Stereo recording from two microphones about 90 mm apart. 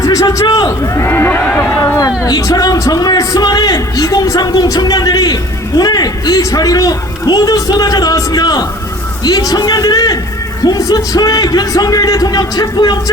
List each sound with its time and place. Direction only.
0.0 s a man's voice: 40° left (ahead or behind)
1.0 s speech: 20° left (ahead or behind)
2.0 s a man's voice: 45° left (ahead or behind)